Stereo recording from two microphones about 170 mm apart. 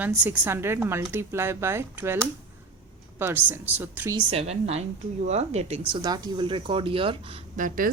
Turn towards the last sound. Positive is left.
turn(degrees=-55)  # may be behind; listen again after turning